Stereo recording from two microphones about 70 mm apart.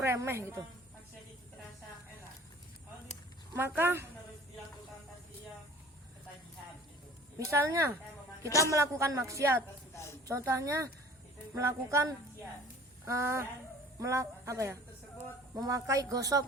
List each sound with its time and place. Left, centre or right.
0.0 s speech: right
3.5 s speech: right
7.5 s speech: right
8.4 s a woman's voice: left
8.7 s music: right
9.9 s a woman's voice: left
10.2 s music: right
15.5 s speech: right